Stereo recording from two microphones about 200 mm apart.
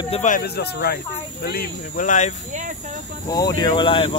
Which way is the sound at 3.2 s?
20° left (ahead or behind).